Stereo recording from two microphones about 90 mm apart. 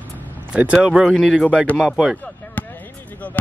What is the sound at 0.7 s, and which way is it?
Speech, 5° right (ahead or behind).